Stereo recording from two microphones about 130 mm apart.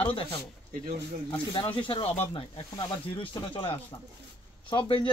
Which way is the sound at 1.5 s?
40° left (ahead or behind).